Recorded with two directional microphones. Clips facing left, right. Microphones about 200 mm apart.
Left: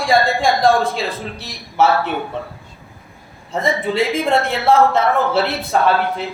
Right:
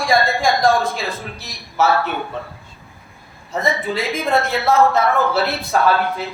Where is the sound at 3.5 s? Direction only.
25° left (ahead or behind).